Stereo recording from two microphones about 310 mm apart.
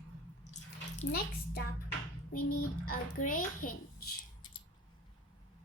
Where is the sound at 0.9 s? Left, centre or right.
Left.